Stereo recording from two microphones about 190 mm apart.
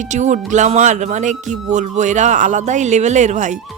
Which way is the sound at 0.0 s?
40° right (ahead or behind).